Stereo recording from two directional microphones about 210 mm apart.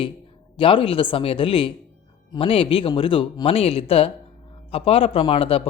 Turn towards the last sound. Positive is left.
turn(degrees=25)  # may be behind; listen again after turning